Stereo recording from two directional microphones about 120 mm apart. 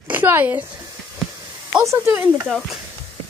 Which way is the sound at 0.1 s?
15° right (ahead or behind).